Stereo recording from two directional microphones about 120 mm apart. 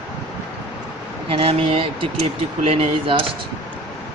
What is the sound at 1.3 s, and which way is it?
Speech, 50° right (ahead or behind).